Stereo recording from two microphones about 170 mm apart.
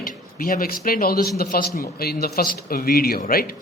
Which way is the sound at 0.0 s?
55° left (ahead or behind).